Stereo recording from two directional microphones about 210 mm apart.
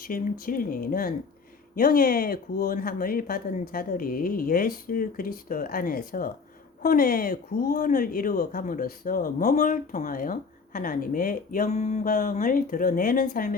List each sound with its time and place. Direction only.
0.0 s speech: 45° left (ahead or behind)